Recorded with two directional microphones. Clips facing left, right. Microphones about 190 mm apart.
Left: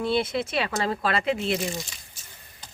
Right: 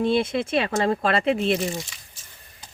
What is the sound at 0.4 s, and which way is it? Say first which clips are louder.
Speech: right 5 dB; 50° right (ahead or behind).